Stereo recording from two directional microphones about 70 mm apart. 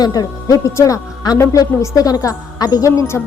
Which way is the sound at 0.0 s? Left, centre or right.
Left.